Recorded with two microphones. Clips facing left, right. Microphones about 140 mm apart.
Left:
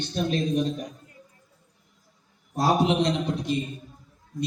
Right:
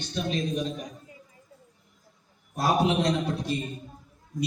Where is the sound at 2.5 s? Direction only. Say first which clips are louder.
Left 2 dB; 30° left (ahead or behind).